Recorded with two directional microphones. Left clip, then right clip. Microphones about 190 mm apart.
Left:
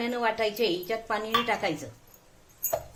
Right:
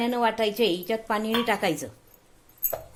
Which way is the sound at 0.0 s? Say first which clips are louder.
Right 3 dB; 50° right (ahead or behind).